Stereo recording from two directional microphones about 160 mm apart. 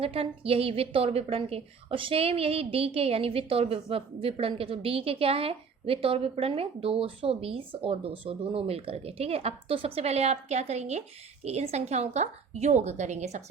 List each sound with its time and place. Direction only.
0.0 s a woman's voice: 35° right (ahead or behind)